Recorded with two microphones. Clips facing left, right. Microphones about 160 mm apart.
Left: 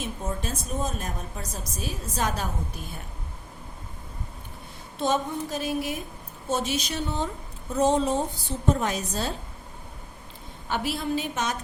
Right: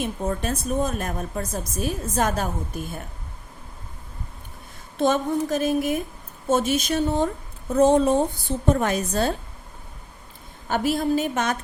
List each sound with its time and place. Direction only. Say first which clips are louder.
0.0 s a woman's voice: right 6 dB; 60° right (ahead or behind)
4.9 s a woman's voice: right 5 dB; 55° right (ahead or behind)
10.7 s a woman's voice: right 6 dB; 45° right (ahead or behind)